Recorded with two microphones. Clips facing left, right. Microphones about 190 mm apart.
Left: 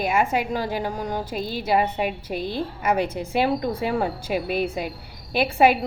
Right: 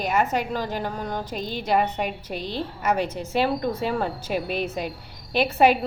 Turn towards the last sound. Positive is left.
turn(degrees=10)  # may be behind; listen again after turning